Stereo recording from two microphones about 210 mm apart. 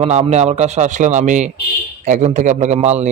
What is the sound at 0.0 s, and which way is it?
Speech, 30° right (ahead or behind).